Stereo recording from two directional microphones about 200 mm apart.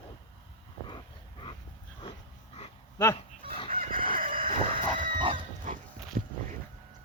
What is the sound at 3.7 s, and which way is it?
Crowing, 45° right (ahead or behind).